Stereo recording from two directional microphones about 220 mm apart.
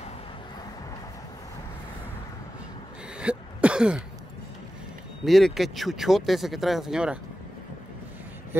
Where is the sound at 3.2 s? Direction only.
5° right (ahead or behind).